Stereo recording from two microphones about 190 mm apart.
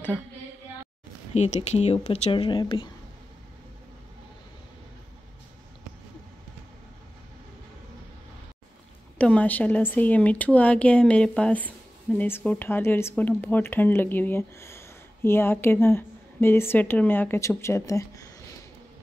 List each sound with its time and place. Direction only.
1.3 s speech: 35° left (ahead or behind)
9.2 s speech: 5° left (ahead or behind)